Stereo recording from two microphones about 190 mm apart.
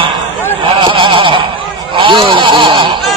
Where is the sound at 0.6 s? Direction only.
25° right (ahead or behind).